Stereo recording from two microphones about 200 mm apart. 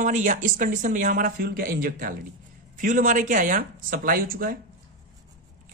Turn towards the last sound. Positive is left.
turn(degrees=-45)  # may be behind; listen again after turning